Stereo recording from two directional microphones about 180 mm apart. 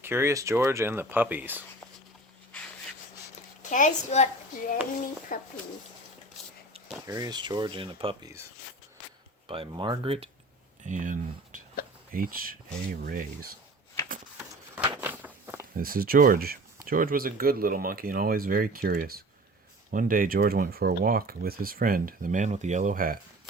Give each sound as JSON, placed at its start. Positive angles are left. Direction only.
{"t": 0.0, "sound": "speech", "side_deg": -15}
{"t": 3.6, "sound": "a child's voice", "side_deg": 45}
{"t": 5.3, "sound": "a child's voice", "side_deg": 50}
{"t": 7.1, "sound": "speech", "side_deg": -20}
{"t": 9.5, "sound": "speech", "side_deg": -25}
{"t": 10.8, "sound": "a sound", "side_deg": -45}
{"t": 12.1, "sound": "speech", "side_deg": -50}
{"t": 14.3, "sound": "a sound", "side_deg": -10}
{"t": 15.7, "sound": "speech", "side_deg": -55}